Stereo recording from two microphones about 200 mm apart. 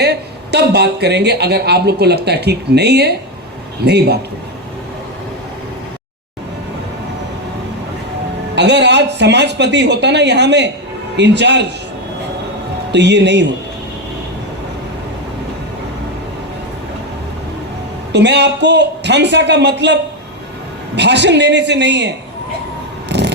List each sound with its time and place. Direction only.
0.0 s speech: 55° right (ahead or behind)
8.5 s speech: 60° right (ahead or behind)
12.9 s speech: 60° right (ahead or behind)
18.1 s speech: 60° right (ahead or behind)
23.0 s a sound: 60° right (ahead or behind)